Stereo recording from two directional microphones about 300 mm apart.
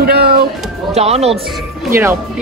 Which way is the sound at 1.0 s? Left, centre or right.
Right.